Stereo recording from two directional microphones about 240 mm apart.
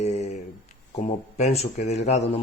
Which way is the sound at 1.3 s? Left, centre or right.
Left.